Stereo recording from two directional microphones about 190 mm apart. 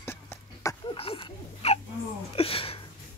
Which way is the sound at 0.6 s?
15° left (ahead or behind).